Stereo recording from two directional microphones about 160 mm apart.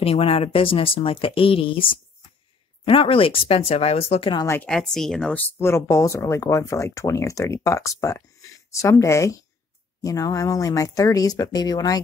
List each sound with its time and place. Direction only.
0.0 s speech: 35° left (ahead or behind)
4.6 s speech: 5° left (ahead or behind)
5.6 s speech: 15° left (ahead or behind)